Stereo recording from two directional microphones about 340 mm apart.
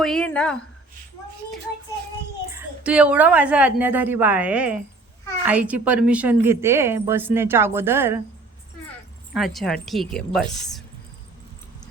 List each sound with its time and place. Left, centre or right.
0.0 s a woman's voice: centre
2.5 s a woman's voice: centre
9.3 s a woman's voice: centre